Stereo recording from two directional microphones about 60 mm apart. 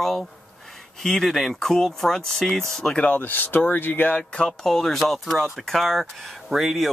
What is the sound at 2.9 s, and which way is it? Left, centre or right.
Speech, left.